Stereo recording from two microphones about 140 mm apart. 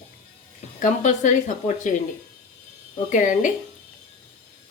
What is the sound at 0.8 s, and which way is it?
A woman's voice, 60° left (ahead or behind).